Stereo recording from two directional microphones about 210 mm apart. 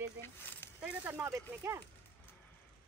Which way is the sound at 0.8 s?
5° right (ahead or behind).